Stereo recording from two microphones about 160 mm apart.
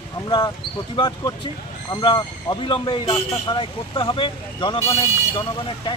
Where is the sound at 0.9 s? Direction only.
30° left (ahead or behind).